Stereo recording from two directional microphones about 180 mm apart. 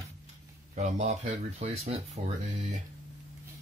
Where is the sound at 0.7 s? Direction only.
40° right (ahead or behind).